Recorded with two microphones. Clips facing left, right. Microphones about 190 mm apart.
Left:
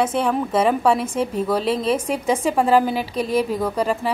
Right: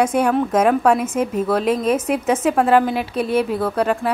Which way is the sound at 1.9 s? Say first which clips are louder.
Right 2 dB; 5° right (ahead or behind).